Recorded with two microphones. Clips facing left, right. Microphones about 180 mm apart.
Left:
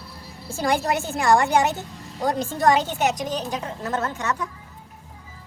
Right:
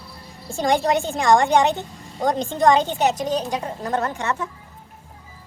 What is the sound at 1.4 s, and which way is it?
Speech, centre (ahead or behind).